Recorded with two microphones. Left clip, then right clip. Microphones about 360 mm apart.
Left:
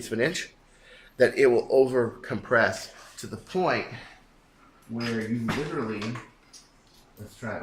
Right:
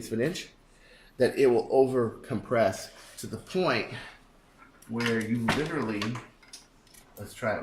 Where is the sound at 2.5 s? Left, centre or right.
Left.